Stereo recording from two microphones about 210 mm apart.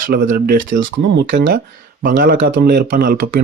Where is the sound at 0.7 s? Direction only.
60° right (ahead or behind).